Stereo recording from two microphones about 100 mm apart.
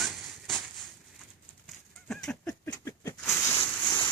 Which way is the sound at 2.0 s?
5° left (ahead or behind).